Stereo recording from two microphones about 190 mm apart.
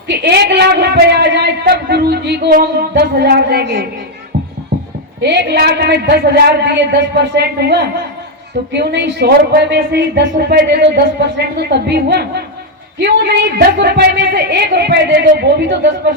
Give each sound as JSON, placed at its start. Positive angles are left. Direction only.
{"t": 0.1, "sound": "a man's voice", "side_deg": -60}
{"t": 5.2, "sound": "speech", "side_deg": -60}